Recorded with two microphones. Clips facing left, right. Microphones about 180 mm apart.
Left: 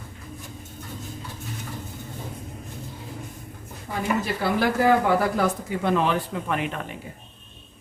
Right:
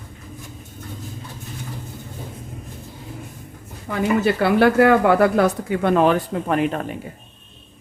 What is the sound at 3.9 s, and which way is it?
Speech, 70° right (ahead or behind).